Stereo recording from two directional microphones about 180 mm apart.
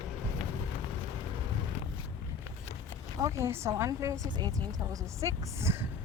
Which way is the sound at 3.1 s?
15° right (ahead or behind).